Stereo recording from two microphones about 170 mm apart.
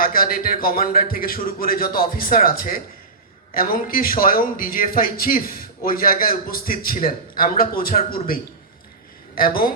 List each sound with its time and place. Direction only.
0.0 s speech: 60° left (ahead or behind)
9.4 s speech: 60° left (ahead or behind)